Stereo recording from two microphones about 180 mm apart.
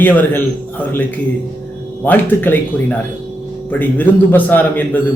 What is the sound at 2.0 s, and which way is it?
Speech, 10° left (ahead or behind).